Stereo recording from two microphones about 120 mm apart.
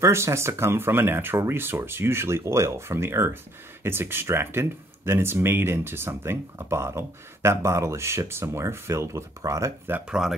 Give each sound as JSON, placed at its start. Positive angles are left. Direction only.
{"t": 0.0, "sound": "speech", "side_deg": -25}
{"t": 9.8, "sound": "speech", "side_deg": -10}